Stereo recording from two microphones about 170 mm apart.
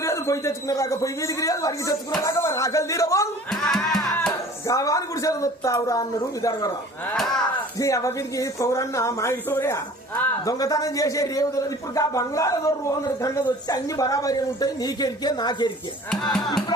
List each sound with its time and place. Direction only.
0.0 s a man's voice: 15° left (ahead or behind)
3.5 s music: 5° left (ahead or behind)
4.6 s speech: 20° left (ahead or behind)
7.0 s speech: 5° left (ahead or behind)
7.8 s a man's voice: 20° left (ahead or behind)
16.0 s speech: 5° left (ahead or behind)